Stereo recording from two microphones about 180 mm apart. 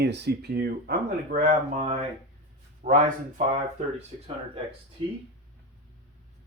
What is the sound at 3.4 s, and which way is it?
Speech, 40° right (ahead or behind).